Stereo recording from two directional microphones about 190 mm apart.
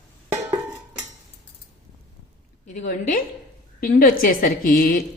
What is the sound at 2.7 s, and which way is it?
A woman's voice, 45° left (ahead or behind).